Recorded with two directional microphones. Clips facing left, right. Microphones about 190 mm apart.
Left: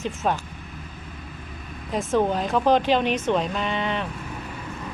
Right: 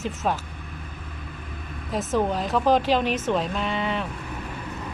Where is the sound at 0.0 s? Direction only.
5° right (ahead or behind).